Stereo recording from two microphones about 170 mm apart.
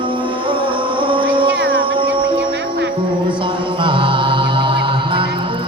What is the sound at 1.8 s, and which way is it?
Music, 30° right (ahead or behind).